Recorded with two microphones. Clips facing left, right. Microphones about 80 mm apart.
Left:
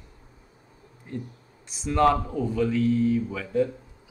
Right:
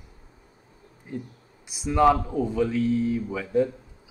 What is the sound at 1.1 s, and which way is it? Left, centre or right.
Speech, centre.